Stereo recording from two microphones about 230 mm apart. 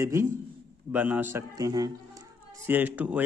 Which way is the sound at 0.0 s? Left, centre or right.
Centre.